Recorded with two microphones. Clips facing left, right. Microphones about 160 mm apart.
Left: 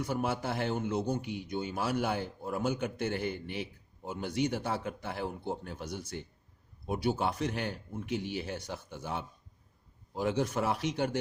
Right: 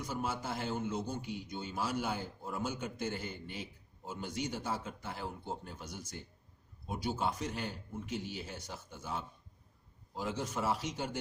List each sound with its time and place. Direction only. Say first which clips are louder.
0.0 s a man's voice: left 5 dB; 65° left (ahead or behind)